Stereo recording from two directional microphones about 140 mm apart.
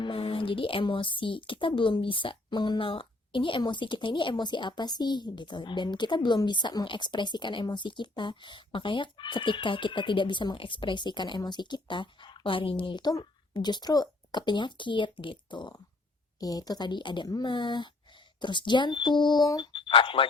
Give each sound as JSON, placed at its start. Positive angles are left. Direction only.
{"t": 0.0, "sound": "speech", "side_deg": 40}